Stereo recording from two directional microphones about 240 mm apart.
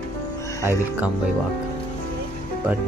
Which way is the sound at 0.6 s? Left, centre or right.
Centre.